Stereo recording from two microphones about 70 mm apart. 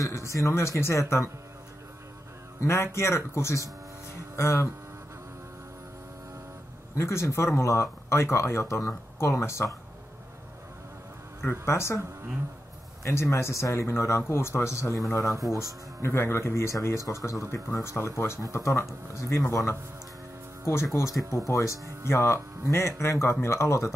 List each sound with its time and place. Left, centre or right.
0.0 s speech: left
2.6 s speech: left
7.0 s speech: left
11.6 s speech: left
13.0 s speech: left
16.0 s speech: left
16.7 s speech: left
21.5 s speech: left
22.0 s speech: left